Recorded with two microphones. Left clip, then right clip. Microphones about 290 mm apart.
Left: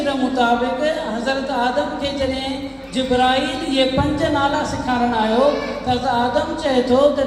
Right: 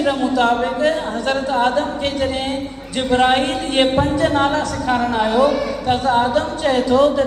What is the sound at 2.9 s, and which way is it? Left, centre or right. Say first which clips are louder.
Music: right 1 dB; right.